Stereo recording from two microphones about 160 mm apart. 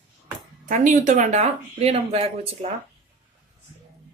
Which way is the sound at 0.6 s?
55° right (ahead or behind).